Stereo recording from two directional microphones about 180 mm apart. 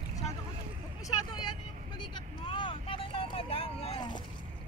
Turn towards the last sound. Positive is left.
turn(degrees=30)  # may be behind; listen again after turning